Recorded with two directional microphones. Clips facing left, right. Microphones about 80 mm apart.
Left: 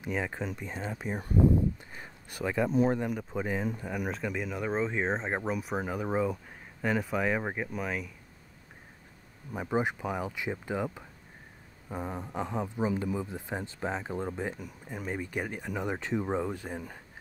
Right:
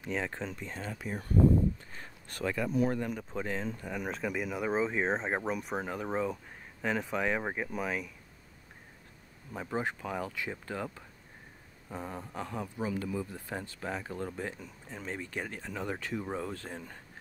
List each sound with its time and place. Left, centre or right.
0.0 s speech: centre
2.5 s a man's voice: left
3.1 s speech: centre
9.5 s a man's voice: centre